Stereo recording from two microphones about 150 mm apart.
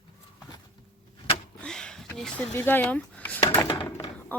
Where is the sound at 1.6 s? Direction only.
5° left (ahead or behind).